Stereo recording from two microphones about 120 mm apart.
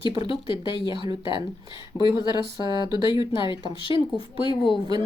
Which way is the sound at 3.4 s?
45° left (ahead or behind).